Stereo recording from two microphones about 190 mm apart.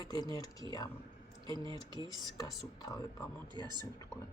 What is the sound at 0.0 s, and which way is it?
Speech, 20° left (ahead or behind).